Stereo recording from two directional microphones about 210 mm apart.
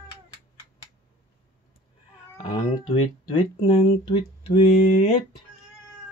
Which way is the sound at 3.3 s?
25° left (ahead or behind).